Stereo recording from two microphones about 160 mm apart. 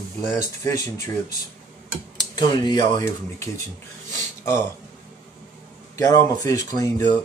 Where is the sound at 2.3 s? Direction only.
25° left (ahead or behind).